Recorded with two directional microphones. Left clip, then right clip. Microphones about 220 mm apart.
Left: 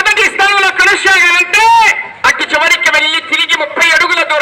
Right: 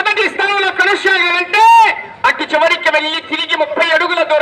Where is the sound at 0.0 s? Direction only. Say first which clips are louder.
Left 5 dB; 50° right (ahead or behind).